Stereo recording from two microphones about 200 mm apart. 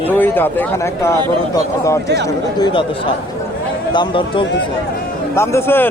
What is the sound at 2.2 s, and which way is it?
Speech, 20° left (ahead or behind).